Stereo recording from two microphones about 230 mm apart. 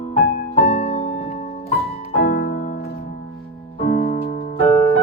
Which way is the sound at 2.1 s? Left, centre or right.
Left.